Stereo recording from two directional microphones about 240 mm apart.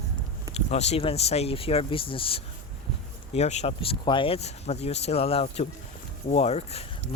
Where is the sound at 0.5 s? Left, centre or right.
Left.